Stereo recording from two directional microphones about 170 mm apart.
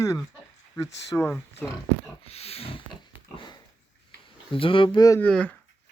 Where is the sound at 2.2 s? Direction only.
35° left (ahead or behind).